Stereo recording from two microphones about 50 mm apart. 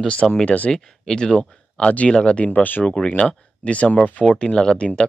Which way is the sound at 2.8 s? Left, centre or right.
Left.